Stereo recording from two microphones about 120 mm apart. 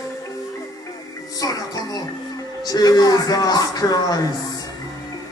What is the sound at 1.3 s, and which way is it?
Music, 35° left (ahead or behind).